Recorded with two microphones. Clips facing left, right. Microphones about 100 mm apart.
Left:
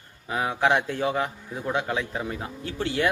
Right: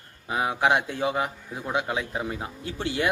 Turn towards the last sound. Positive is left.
turn(degrees=-20)  # may be behind; listen again after turning